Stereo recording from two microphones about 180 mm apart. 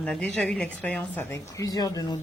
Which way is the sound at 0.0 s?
5° left (ahead or behind).